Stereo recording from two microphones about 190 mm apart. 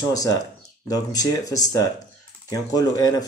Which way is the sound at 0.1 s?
20° left (ahead or behind).